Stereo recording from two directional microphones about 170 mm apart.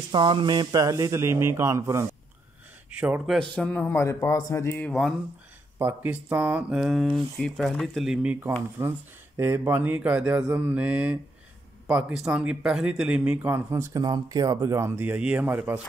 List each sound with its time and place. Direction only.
0.1 s speech: 30° right (ahead or behind); by 3.3 s 10° right (ahead or behind)
3.3 s a man's voice: 5° left (ahead or behind)
5.8 s speech: 10° right (ahead or behind)